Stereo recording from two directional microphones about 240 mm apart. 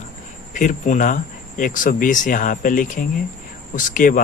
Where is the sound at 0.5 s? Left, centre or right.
Left.